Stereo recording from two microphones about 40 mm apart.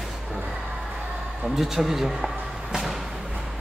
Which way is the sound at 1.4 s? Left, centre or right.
Centre.